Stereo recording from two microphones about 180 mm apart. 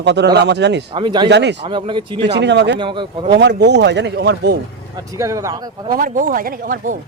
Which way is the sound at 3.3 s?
70° right (ahead or behind).